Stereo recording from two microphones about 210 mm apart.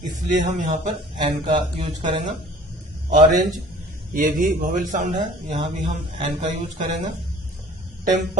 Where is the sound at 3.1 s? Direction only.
35° right (ahead or behind).